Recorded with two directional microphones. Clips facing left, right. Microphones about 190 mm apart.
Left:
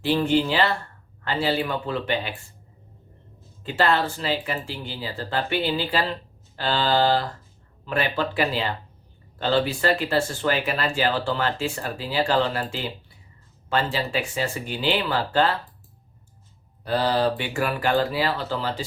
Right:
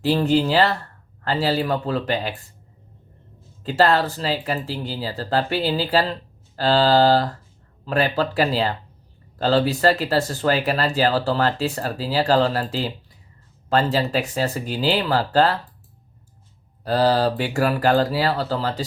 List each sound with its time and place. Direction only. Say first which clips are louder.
0.0 s speech: right 2 dB; 40° right (ahead or behind)
3.6 s speech: right 4 dB; 40° right (ahead or behind)
16.8 s speech: right 3 dB; 40° right (ahead or behind)